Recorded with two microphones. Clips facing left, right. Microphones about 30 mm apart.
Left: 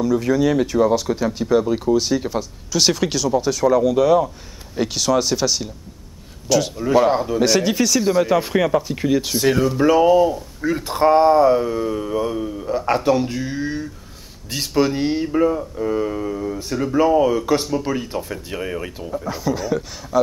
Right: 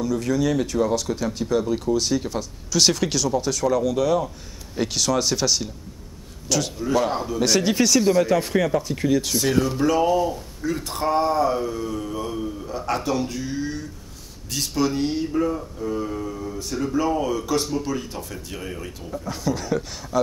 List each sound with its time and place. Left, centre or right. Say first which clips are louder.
0.0 s speech: left 5 dB; centre
6.9 s speech: left 7 dB; centre
8.1 s speech: left 2 dB; centre; by 19.0 s left
19.0 s speech: left 2 dB; centre